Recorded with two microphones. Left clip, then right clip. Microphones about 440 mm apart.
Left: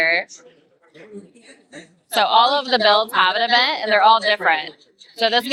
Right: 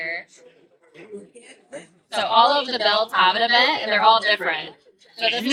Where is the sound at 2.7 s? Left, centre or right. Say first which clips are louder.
Left 4 dB; left.